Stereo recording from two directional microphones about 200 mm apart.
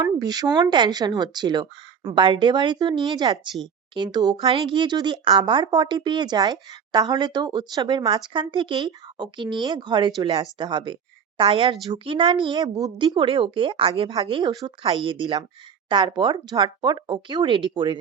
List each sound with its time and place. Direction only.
0.0 s a woman's voice: 20° right (ahead or behind)